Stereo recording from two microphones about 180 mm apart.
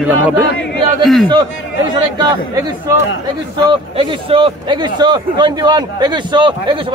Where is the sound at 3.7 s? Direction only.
30° right (ahead or behind).